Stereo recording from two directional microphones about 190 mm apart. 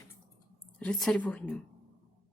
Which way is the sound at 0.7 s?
5° left (ahead or behind).